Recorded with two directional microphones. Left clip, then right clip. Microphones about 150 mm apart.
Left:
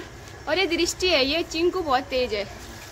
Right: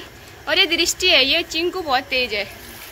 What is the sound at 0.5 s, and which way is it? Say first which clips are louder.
A woman's voice: right 6 dB; 5° left (ahead or behind).